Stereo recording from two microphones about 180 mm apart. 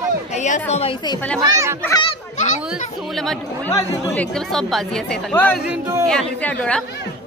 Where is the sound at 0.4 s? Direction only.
40° left (ahead or behind).